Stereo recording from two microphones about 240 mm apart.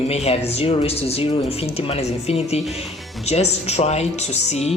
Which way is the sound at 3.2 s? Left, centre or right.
Left.